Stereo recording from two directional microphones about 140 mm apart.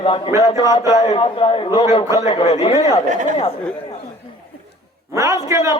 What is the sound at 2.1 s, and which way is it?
Speech, 25° right (ahead or behind).